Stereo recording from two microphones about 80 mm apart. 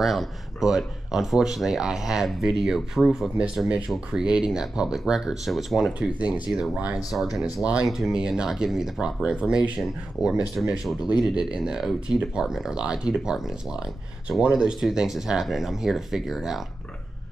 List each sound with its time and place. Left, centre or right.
0.0 s speech: centre
5.9 s speech: centre
6.5 s speech: centre
10.2 s speech: left
10.6 s speech: centre